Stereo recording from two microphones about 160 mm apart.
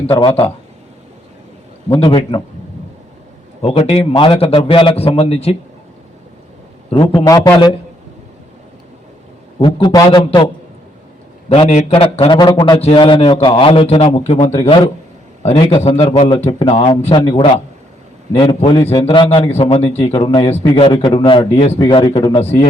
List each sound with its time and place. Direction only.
0.1 s a man's voice: 35° left (ahead or behind)
1.9 s a man's voice: 35° left (ahead or behind)
3.6 s a man's voice: 40° left (ahead or behind)
7.3 s a man's voice: 20° left (ahead or behind)
9.6 s a man's voice: 30° left (ahead or behind)
11.4 s a man's voice: 40° left (ahead or behind)